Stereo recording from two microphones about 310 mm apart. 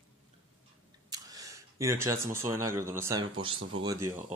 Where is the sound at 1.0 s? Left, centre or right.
Centre.